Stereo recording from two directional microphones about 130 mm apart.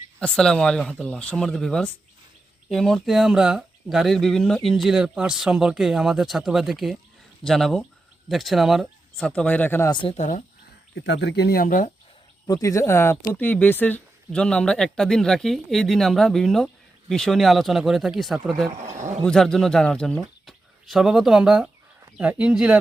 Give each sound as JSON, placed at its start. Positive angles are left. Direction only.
{"t": 0.2, "sound": "speech", "side_deg": 5}
{"t": 9.9, "sound": "speech", "side_deg": 40}
{"t": 10.2, "sound": "speech", "side_deg": 85}
{"t": 11.6, "sound": "speech", "side_deg": 90}
{"t": 12.5, "sound": "speech", "side_deg": 25}
{"t": 18.8, "sound": "a man's voice", "side_deg": -65}
{"t": 19.2, "sound": "speech", "side_deg": 5}